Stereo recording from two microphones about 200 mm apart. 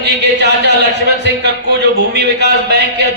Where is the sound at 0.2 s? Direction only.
60° right (ahead or behind).